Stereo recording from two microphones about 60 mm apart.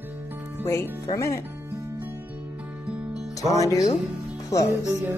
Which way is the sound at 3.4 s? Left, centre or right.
Left.